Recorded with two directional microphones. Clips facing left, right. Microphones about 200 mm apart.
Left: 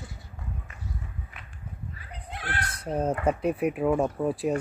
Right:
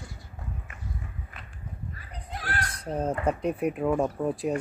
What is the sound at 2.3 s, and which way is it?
Crow, 40° right (ahead or behind).